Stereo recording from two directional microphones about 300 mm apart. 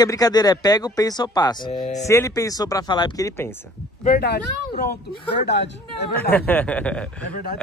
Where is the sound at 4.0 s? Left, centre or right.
Left.